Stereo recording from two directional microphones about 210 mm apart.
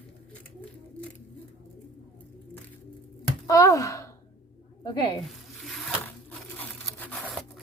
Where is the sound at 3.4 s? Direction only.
15° left (ahead or behind).